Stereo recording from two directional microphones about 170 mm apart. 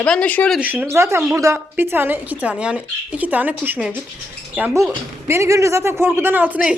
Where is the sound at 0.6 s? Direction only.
10° right (ahead or behind).